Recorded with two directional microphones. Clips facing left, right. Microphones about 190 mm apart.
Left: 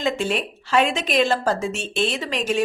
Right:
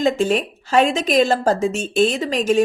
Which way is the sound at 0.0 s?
40° right (ahead or behind).